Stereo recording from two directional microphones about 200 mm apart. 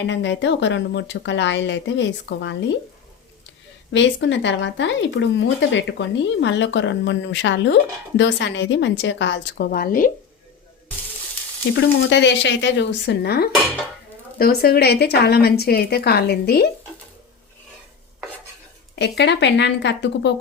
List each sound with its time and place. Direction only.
0.0 s speech: 65° left (ahead or behind)
3.9 s speech: 65° left (ahead or behind); by 10.1 s 45° left (ahead or behind)
11.7 s a woman's voice: 65° left (ahead or behind)
18.9 s speech: 60° left (ahead or behind)